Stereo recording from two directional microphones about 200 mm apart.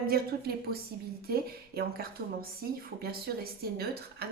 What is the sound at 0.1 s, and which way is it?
Speech, 50° right (ahead or behind).